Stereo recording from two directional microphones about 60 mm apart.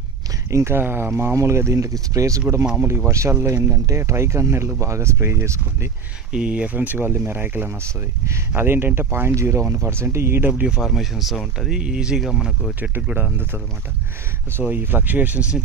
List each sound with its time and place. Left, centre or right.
0.5 s speech: right
0.7 s speech: right
1.3 s speech: right
6.3 s speech: centre; by 9.3 s right
9.3 s speech: right
10.8 s speech: centre
13.1 s speech: right
14.7 s speech: right